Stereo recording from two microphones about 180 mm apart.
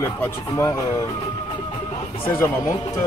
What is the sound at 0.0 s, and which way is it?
Speech, 15° left (ahead or behind).